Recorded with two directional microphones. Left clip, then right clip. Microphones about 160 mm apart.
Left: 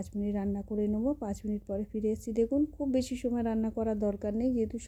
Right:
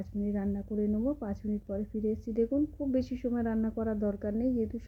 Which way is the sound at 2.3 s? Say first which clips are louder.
Left 1 dB; 30° left (ahead or behind).